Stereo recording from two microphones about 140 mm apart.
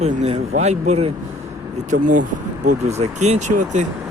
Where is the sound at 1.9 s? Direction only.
70° right (ahead or behind).